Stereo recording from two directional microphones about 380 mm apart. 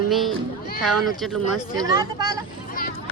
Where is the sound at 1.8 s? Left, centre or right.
Centre.